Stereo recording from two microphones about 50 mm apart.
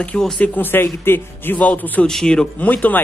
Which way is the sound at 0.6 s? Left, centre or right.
Left.